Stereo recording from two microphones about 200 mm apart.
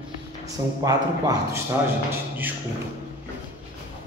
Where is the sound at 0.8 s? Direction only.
15° right (ahead or behind).